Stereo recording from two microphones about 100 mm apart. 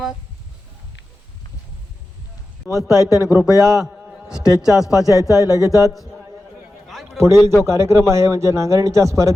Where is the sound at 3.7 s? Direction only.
5° right (ahead or behind).